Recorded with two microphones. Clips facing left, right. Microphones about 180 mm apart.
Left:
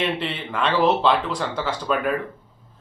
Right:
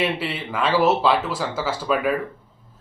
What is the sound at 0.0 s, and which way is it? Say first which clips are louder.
A man's voice: right 1 dB; 5° right (ahead or behind).